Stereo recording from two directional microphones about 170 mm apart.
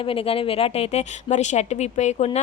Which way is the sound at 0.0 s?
35° left (ahead or behind).